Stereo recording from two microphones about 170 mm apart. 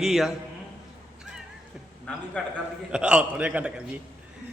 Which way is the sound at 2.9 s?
5° right (ahead or behind).